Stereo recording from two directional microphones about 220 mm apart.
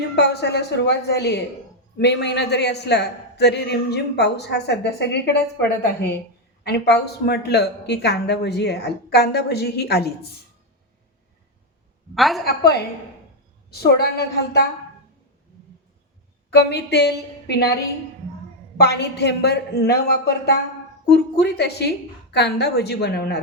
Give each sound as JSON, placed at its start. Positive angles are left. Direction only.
{"t": 0.2, "sound": "a man's voice", "side_deg": 50}
{"t": 12.1, "sound": "a woman's voice", "side_deg": 0}
{"t": 12.5, "sound": "a man's voice", "side_deg": 45}
{"t": 16.5, "sound": "a man's voice", "side_deg": 50}
{"t": 18.8, "sound": "a man's voice", "side_deg": 50}